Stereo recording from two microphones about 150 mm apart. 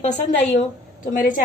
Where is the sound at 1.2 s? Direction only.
65° left (ahead or behind).